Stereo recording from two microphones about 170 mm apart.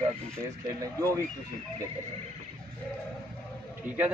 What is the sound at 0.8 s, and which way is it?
Speech, 20° right (ahead or behind).